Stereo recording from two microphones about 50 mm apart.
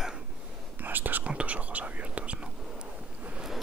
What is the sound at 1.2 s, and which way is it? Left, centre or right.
Whispering, right.